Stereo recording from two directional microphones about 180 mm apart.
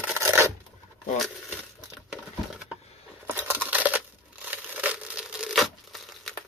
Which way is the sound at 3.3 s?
10° right (ahead or behind).